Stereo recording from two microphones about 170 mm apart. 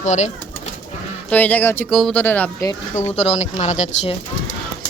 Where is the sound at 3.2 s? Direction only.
40° left (ahead or behind).